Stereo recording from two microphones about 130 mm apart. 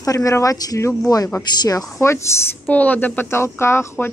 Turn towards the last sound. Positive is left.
turn(degrees=20)  # may be behind; listen again after turning